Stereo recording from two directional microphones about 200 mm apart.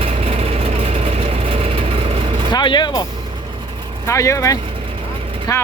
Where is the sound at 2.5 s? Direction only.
20° left (ahead or behind).